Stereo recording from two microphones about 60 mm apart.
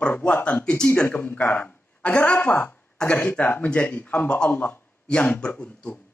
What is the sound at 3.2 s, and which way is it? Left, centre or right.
Speech, left.